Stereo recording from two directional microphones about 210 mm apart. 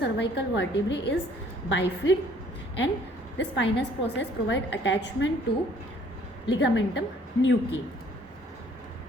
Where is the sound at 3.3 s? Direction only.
55° left (ahead or behind).